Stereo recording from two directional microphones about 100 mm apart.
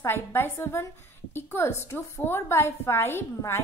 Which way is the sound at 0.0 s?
25° left (ahead or behind).